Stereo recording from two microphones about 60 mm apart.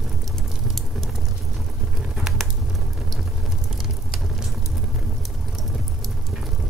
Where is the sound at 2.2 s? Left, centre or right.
Centre.